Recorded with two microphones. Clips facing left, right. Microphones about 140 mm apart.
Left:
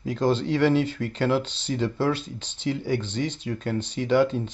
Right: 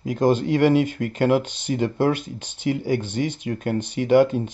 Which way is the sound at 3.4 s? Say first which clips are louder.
Right 3 dB; 55° right (ahead or behind).